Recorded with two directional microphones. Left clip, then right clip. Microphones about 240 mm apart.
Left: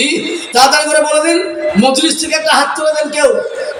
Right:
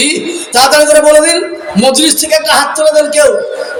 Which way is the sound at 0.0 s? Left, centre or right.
Right.